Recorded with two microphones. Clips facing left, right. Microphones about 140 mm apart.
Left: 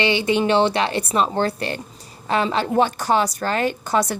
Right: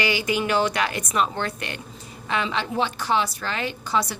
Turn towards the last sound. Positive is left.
turn(degrees=50)  # may be behind; listen again after turning